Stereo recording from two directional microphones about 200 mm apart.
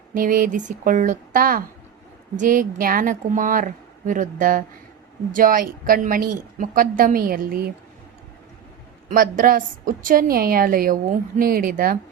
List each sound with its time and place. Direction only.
0.1 s a woman's voice: 45° right (ahead or behind)
9.0 s a woman's voice: 45° right (ahead or behind)